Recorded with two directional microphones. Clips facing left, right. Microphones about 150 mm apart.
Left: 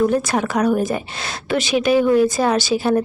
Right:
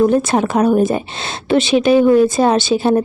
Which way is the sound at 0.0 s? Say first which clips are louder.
Right 4 dB; 25° right (ahead or behind).